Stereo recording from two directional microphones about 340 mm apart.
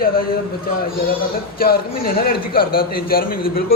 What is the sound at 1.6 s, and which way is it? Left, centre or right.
A man's voice, left.